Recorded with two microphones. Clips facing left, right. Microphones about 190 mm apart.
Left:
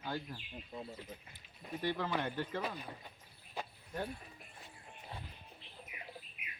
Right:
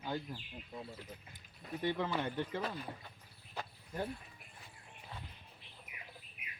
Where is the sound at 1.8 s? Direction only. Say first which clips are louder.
Right 1 dB; 20° right (ahead or behind).